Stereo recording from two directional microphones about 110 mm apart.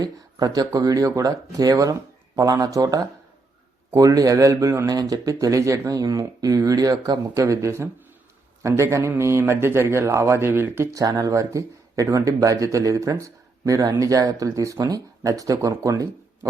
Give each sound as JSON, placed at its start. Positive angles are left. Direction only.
{"t": 0.0, "sound": "speech", "side_deg": -35}
{"t": 11.0, "sound": "speech", "side_deg": -35}